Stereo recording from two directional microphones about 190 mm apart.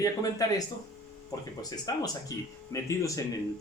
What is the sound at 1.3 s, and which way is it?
Speech, 20° left (ahead or behind).